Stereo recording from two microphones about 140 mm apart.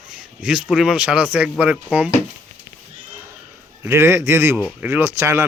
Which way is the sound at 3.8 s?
15° right (ahead or behind).